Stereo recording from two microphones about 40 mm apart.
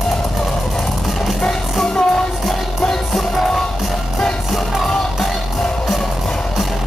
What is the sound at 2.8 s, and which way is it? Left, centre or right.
Music, centre.